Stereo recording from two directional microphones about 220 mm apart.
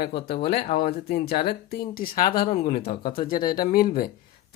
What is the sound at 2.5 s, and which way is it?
Speech, 25° left (ahead or behind).